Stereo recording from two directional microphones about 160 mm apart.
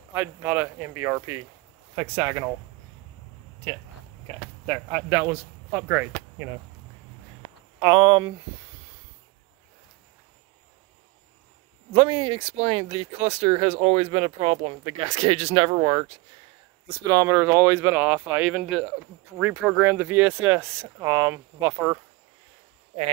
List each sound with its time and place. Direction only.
0.1 s speech: 10° right (ahead or behind)
4.6 s speech: 10° right (ahead or behind)
7.8 s speech: 30° right (ahead or behind)
11.9 s speech: 30° right (ahead or behind)